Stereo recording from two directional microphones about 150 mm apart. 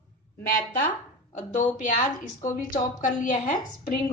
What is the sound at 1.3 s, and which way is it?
A woman's voice, 55° left (ahead or behind).